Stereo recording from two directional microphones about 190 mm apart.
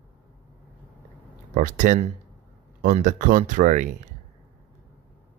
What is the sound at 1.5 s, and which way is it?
Speech, 45° right (ahead or behind).